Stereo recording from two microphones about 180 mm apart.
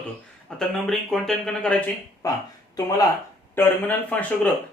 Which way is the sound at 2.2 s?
20° left (ahead or behind).